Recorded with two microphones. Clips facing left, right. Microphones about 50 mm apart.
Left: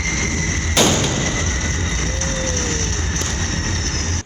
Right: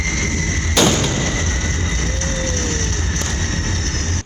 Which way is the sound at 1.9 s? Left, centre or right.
Left.